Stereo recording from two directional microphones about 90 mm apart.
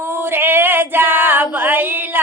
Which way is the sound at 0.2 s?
25° right (ahead or behind).